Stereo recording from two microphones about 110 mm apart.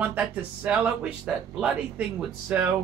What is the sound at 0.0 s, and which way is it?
Speech, 10° right (ahead or behind).